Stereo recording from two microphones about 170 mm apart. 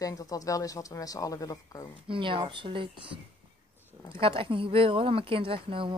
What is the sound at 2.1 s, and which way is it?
Speech, 30° right (ahead or behind).